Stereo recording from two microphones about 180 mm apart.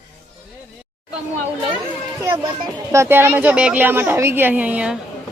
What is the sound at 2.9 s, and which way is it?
A woman's voice, 15° right (ahead or behind).